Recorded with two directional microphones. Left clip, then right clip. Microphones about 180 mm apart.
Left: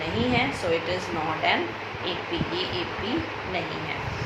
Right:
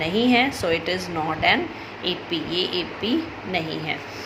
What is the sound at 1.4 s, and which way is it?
Speech, 60° right (ahead or behind).